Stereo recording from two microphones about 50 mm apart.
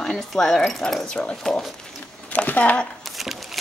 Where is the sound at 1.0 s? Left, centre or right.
Left.